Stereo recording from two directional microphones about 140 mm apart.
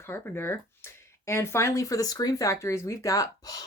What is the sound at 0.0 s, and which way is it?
Speech, 15° left (ahead or behind).